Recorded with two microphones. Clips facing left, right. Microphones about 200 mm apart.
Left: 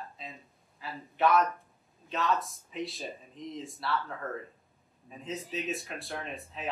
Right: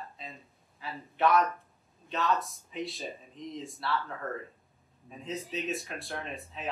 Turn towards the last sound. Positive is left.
turn(degrees=0)  # may be behind; listen again after turning